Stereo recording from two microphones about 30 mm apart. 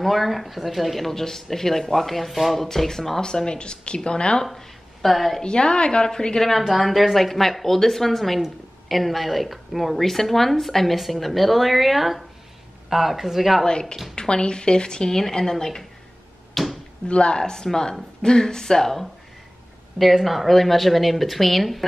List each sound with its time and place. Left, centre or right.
0.0 s speech: centre
1.1 s speech: centre
3.2 s speech: left
4.6 s a woman's voice: centre
5.4 s speech: left
6.6 s speech: centre
13.7 s speech: left
16.6 s a sound: centre
17.1 s speech: left
17.4 s speech: left
20.2 s speech: centre